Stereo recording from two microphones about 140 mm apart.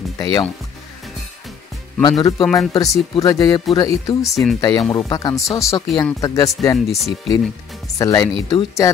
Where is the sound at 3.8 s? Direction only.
25° left (ahead or behind).